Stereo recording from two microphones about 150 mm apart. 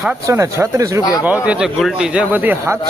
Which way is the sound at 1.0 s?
25° left (ahead or behind).